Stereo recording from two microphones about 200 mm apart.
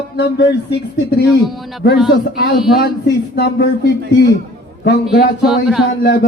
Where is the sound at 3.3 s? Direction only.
55° left (ahead or behind).